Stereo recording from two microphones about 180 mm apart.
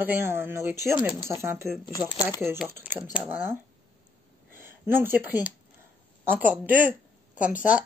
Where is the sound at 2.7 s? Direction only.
10° right (ahead or behind).